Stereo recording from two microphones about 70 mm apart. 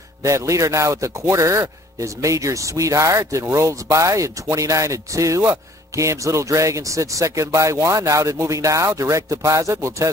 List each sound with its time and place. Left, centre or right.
0.2 s speech: right